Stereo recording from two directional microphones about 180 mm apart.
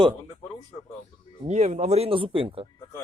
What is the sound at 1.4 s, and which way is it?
Speech, 40° right (ahead or behind).